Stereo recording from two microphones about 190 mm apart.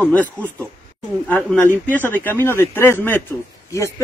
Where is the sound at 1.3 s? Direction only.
10° left (ahead or behind).